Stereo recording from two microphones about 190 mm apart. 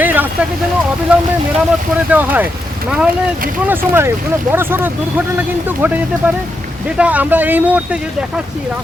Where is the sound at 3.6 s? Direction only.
10° right (ahead or behind).